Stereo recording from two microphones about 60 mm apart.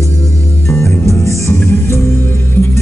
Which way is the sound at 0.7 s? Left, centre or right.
Left.